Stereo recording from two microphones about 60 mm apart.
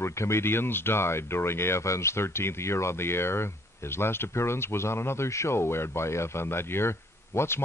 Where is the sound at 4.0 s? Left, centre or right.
Left.